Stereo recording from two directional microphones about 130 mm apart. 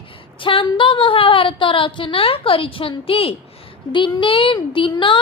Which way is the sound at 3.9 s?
40° left (ahead or behind).